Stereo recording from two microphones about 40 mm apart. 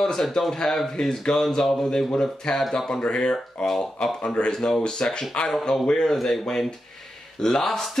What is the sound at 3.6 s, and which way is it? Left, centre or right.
Speech, centre.